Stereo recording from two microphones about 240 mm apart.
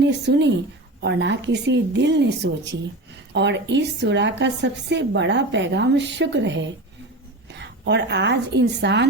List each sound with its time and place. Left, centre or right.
0.0 s a woman's voice: right